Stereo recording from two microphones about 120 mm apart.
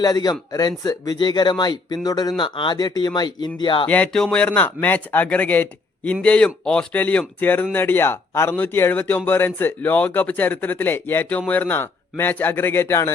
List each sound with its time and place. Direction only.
0.0 s speech: 35° left (ahead or behind)
2.4 s speech: 40° left (ahead or behind)
3.8 s speech: 10° left (ahead or behind)